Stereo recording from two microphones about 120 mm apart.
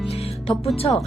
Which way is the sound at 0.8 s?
50° left (ahead or behind).